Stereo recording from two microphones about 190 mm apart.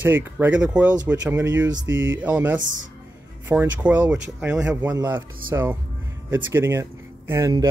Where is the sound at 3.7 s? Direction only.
10° right (ahead or behind).